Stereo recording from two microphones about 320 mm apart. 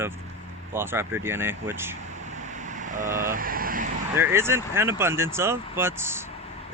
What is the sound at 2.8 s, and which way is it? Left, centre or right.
Speech, right.